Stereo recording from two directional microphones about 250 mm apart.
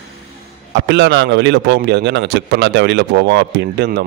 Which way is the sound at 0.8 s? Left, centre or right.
Right.